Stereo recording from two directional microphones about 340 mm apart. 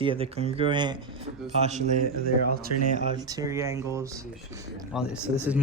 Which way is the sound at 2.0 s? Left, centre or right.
Right.